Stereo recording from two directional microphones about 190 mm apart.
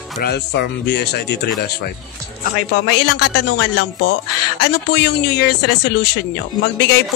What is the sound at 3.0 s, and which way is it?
A man's voice, 65° left (ahead or behind).